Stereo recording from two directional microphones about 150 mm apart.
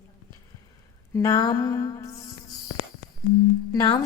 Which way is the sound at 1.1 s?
25° left (ahead or behind).